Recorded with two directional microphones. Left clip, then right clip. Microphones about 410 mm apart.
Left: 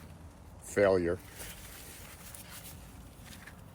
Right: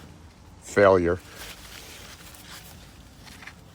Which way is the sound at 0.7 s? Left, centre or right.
Centre.